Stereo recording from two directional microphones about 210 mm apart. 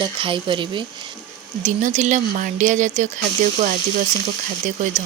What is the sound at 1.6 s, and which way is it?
Speech, 35° right (ahead or behind).